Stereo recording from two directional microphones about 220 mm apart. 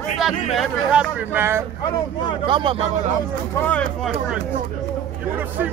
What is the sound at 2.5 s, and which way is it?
Speech, 20° right (ahead or behind).